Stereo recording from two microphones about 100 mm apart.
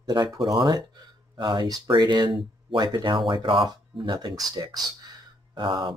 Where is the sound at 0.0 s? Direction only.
45° right (ahead or behind).